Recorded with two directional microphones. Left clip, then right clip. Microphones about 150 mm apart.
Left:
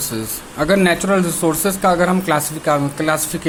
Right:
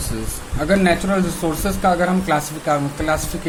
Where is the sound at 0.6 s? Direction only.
35° left (ahead or behind).